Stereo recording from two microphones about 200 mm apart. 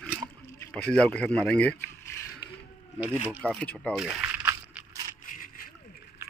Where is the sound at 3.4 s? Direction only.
5° left (ahead or behind).